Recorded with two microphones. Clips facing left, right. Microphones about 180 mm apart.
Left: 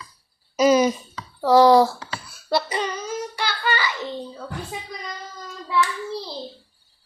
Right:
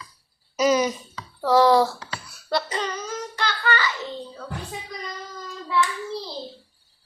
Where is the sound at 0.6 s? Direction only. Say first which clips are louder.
Left 4 dB; 30° left (ahead or behind).